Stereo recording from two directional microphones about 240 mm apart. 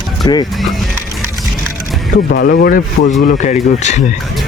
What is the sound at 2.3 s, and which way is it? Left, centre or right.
Speech, left.